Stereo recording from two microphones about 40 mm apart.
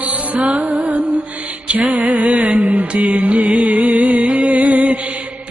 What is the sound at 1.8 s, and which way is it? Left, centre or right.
Mantra, right.